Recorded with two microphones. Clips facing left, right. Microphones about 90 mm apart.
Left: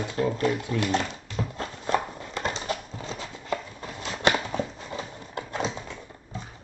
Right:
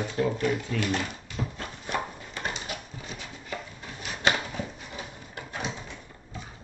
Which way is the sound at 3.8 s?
30° left (ahead or behind).